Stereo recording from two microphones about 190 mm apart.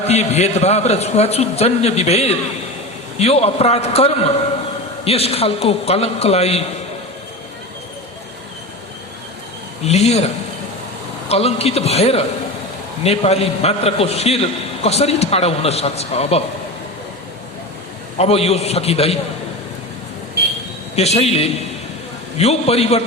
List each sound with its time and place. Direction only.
0.0 s a man's voice: 35° left (ahead or behind)
9.8 s a man's voice: 35° left (ahead or behind)
11.3 s a man's voice: 30° left (ahead or behind)
18.2 s a man's voice: 30° left (ahead or behind)
20.9 s a man's voice: 35° left (ahead or behind)